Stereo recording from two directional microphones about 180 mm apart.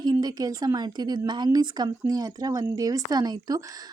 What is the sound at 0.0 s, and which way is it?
A woman's voice, 20° right (ahead or behind).